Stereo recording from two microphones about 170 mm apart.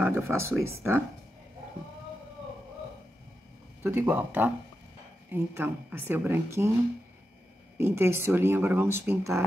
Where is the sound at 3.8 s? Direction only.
15° right (ahead or behind).